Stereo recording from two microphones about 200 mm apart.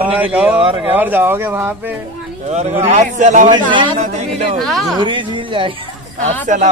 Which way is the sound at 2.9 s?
35° right (ahead or behind).